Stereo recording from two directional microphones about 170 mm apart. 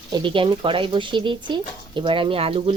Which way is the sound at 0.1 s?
30° right (ahead or behind).